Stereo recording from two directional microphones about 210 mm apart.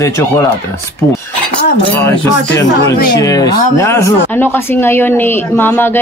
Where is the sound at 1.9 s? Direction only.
10° left (ahead or behind).